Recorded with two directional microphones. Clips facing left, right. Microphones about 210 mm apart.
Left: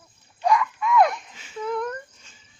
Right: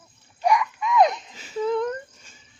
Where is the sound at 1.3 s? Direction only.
35° right (ahead or behind).